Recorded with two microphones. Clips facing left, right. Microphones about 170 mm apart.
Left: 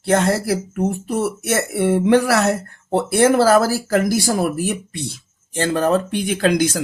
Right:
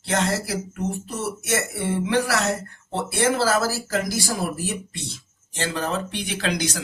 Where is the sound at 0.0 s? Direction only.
55° left (ahead or behind).